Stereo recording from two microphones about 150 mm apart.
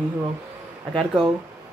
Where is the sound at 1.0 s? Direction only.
30° right (ahead or behind).